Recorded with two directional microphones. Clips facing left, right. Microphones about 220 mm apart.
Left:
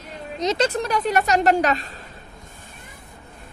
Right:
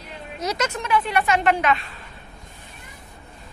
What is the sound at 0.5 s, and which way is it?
A woman's voice, 35° left (ahead or behind).